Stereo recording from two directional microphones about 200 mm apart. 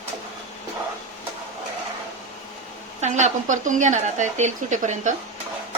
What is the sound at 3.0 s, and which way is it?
Speech, 35° right (ahead or behind).